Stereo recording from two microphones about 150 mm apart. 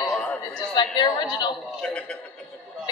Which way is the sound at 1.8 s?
5° left (ahead or behind).